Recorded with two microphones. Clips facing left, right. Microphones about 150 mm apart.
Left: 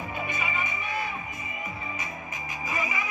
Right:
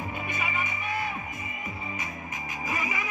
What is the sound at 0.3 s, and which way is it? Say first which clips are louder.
Music: even; 55° right (ahead or behind).